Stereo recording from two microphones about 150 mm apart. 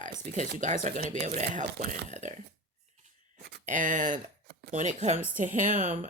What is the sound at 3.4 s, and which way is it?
Speech, 75° right (ahead or behind).